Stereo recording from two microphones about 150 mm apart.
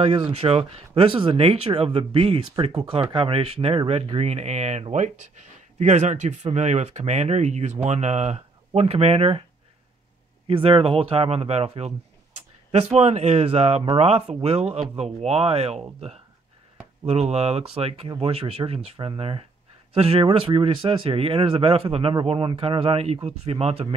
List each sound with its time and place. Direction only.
0.0 s speech: 40° right (ahead or behind)
10.4 s speech: 35° right (ahead or behind)
17.0 s speech: 45° right (ahead or behind)